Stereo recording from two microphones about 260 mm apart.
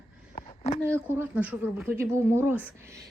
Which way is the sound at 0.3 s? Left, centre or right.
Left.